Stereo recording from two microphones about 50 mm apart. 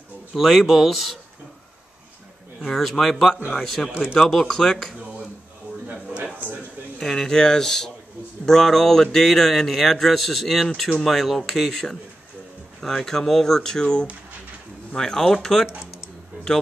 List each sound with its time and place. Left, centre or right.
0.4 s speech: centre
2.6 s speech: centre
5.9 s a sound: centre
7.0 s speech: centre
11.7 s speech: centre